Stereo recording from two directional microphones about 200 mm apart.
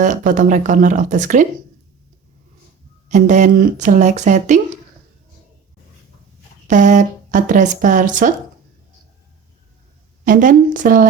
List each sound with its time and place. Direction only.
0.0 s speech: 40° right (ahead or behind)
3.1 s speech: 40° right (ahead or behind)
6.7 s speech: 40° right (ahead or behind)
10.2 s speech: 40° right (ahead or behind)